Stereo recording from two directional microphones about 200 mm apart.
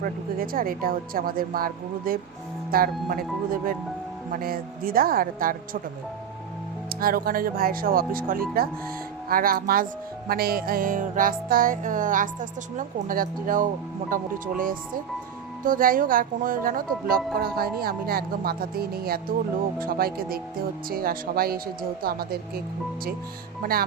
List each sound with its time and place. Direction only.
0.0 s music: 45° right (ahead or behind)
7.0 s music: 45° right (ahead or behind)